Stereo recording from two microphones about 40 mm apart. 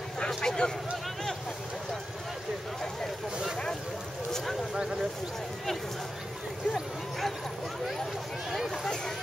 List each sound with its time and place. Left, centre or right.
0.4 s a sound: centre
6.7 s speech: centre
8.5 s speech: centre